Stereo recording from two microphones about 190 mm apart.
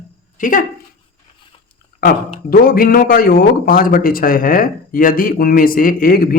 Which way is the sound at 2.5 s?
50° left (ahead or behind).